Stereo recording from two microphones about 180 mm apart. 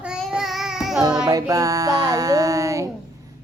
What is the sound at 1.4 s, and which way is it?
Child singing, 20° right (ahead or behind).